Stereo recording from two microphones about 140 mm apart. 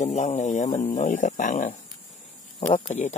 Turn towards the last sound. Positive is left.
turn(degrees=55)  # may be behind; listen again after turning